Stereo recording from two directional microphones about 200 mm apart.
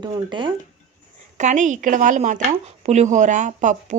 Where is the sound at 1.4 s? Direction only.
35° right (ahead or behind).